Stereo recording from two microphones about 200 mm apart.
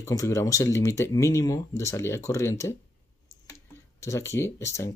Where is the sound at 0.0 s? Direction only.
15° left (ahead or behind).